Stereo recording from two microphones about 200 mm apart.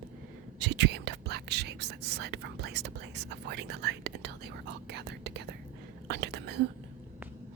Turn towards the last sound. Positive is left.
turn(degrees=-55)  # may be behind; listen again after turning